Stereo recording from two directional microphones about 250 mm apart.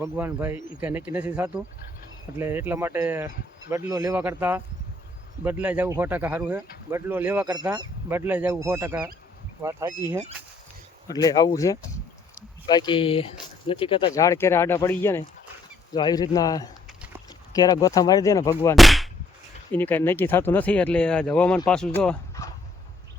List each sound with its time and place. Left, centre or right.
0.0 s speech: centre
11.1 s speech: centre
18.8 s whip: centre
19.7 s speech: centre